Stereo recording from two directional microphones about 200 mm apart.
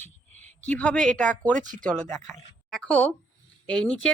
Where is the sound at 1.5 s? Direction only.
40° right (ahead or behind).